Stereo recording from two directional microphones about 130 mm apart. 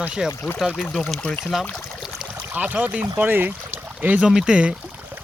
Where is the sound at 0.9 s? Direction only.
5° left (ahead or behind).